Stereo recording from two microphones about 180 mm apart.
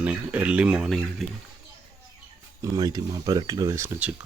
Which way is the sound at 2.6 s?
20° right (ahead or behind).